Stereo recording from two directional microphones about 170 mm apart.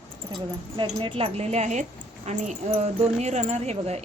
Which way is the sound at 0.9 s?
30° right (ahead or behind).